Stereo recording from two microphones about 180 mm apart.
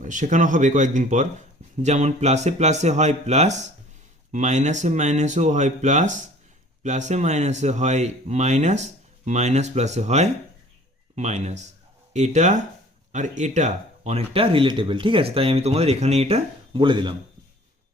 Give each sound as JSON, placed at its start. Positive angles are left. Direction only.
{"t": 0.0, "sound": "speech", "side_deg": -45}